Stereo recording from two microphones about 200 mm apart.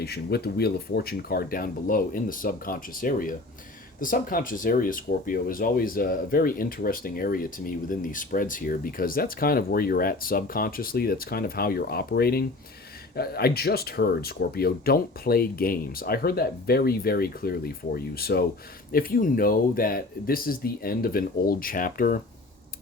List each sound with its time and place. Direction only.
0.0 s speech: 50° left (ahead or behind)